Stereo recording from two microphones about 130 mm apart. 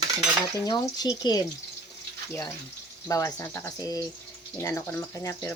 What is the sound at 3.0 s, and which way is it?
Speech, 25° left (ahead or behind).